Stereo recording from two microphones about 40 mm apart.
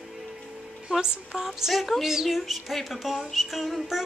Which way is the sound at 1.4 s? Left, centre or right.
Centre.